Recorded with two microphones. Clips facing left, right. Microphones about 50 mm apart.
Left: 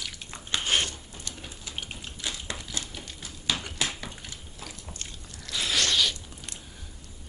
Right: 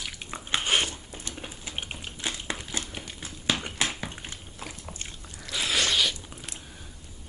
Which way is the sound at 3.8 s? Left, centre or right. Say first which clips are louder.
Right 2 dB; right.